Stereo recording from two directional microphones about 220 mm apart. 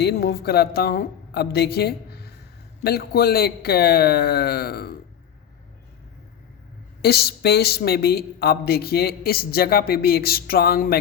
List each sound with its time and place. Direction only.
0.0 s a woman's voice: 45° left (ahead or behind)
7.0 s a woman's voice: 45° left (ahead or behind)